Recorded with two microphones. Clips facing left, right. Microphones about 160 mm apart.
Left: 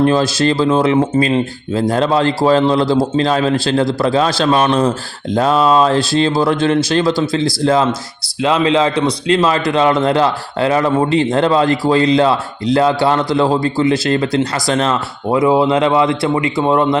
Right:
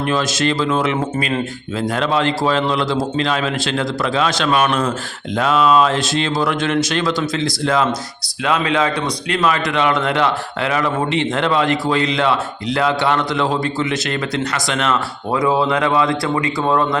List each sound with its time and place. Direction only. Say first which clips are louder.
0.0 s a man's voice: left 6 dB; 35° left (ahead or behind)